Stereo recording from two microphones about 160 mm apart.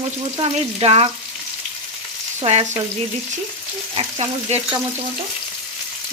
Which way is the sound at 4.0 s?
40° right (ahead or behind).